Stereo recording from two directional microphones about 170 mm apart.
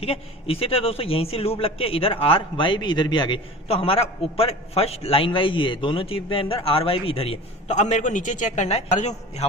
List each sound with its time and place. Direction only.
0.0 s a man's voice: 35° left (ahead or behind)